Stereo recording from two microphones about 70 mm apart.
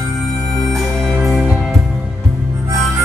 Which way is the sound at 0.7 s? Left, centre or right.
Centre.